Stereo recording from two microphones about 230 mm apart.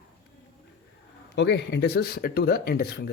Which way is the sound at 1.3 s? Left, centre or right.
Left.